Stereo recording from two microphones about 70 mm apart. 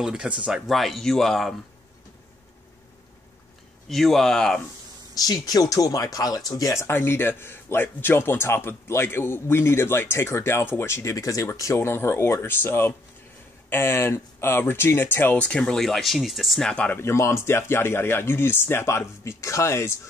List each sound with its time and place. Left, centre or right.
0.0 s speech: centre
0.7 s speech: centre
3.9 s speech: centre
5.1 s speech: left
6.7 s speech: left
11.1 s speech: left
11.8 s speech: left
15.3 s speech: centre
16.6 s speech: centre
17.0 s speech: left